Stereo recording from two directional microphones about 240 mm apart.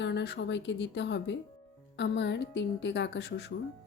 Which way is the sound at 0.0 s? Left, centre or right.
Left.